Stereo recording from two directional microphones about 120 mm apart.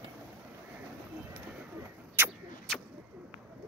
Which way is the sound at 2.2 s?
20° right (ahead or behind).